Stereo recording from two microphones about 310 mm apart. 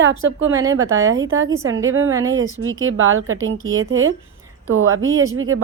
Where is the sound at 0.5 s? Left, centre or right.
Centre.